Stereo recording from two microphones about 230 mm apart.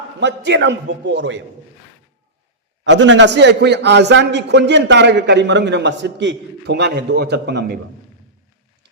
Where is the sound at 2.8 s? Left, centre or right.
Right.